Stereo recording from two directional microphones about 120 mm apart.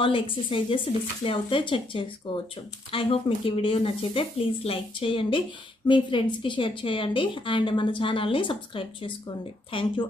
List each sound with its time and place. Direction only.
0.0 s a woman's voice: 45° left (ahead or behind)